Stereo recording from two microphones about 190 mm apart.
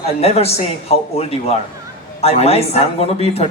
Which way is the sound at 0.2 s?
30° left (ahead or behind).